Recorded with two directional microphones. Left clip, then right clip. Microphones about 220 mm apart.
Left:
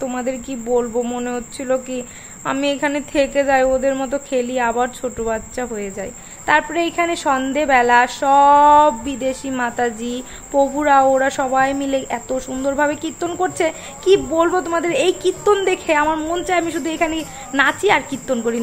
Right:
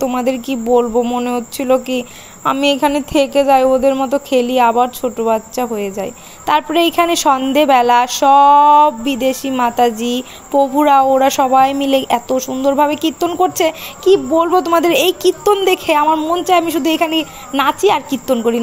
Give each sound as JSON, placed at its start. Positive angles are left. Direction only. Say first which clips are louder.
{"t": 0.0, "sound": "speech", "louder": "right 6 dB", "side_deg": -20}
{"t": 16.2, "sound": "a woman's voice", "louder": "right 6 dB", "side_deg": -10}